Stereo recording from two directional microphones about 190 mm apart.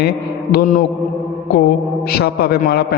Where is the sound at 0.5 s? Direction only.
45° left (ahead or behind).